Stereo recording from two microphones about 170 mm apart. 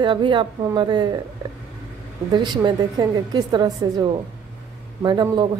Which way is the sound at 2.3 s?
25° right (ahead or behind).